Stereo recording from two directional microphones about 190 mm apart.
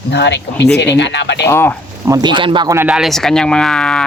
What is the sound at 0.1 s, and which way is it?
Speech, 65° left (ahead or behind).